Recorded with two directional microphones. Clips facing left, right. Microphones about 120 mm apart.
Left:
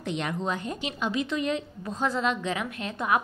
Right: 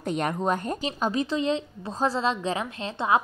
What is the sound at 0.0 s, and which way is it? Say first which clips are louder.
A woman's voice: right 4 dB; 45° right (ahead or behind).